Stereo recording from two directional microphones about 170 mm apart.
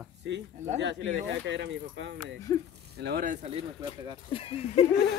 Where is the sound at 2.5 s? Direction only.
20° left (ahead or behind).